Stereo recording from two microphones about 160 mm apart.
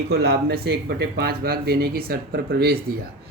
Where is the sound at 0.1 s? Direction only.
80° right.